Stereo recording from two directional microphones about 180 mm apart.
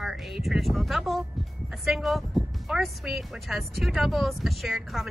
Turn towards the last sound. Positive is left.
turn(degrees=0)  # may be behind; listen again after turning